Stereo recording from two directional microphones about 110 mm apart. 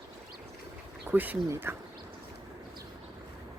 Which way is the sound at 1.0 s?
15° right (ahead or behind).